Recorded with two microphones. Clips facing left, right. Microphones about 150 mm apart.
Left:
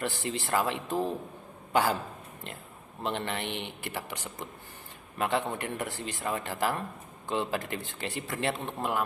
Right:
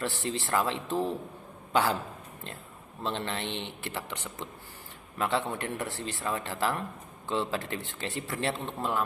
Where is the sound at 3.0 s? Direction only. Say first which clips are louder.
Even; 15° left (ahead or behind).